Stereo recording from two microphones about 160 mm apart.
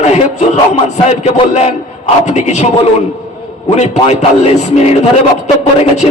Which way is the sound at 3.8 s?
40° left (ahead or behind).